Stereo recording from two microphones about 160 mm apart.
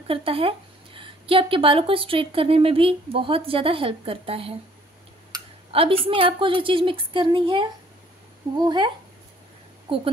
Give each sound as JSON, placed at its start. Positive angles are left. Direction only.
{"t": 0.1, "sound": "speech", "side_deg": -35}
{"t": 5.7, "sound": "a woman's voice", "side_deg": -35}